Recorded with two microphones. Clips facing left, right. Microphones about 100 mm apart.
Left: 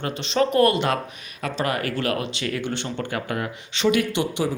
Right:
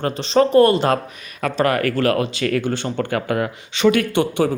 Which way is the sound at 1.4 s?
55° right (ahead or behind).